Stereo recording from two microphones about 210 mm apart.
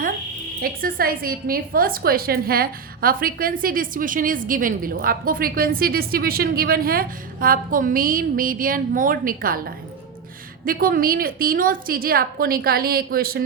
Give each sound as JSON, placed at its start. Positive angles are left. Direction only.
{"t": 0.6, "sound": "a woman's voice", "side_deg": -45}